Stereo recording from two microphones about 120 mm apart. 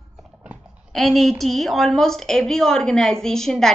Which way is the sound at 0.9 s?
Centre (ahead or behind).